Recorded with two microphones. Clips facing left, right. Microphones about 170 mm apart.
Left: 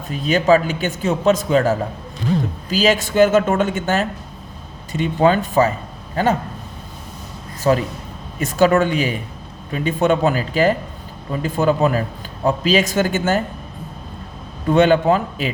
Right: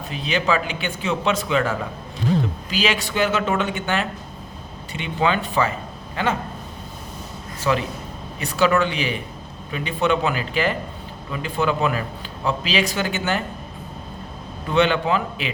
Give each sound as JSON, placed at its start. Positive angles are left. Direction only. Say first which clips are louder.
{"t": 0.1, "sound": "a man's voice", "louder": "left 7 dB", "side_deg": 45}
{"t": 7.6, "sound": "a man's voice", "louder": "left 5 dB", "side_deg": 40}
{"t": 14.7, "sound": "a man's voice", "louder": "left 6 dB", "side_deg": 45}